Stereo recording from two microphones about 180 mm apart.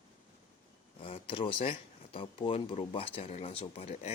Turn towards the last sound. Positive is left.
turn(degrees=35)  # may be behind; listen again after turning